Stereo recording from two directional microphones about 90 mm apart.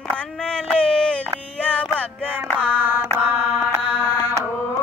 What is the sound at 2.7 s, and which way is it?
Music, 20° right (ahead or behind).